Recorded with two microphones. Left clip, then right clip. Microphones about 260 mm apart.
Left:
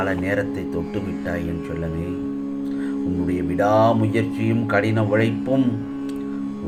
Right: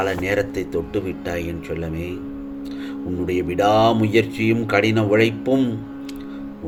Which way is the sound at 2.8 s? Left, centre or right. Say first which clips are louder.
Even; right.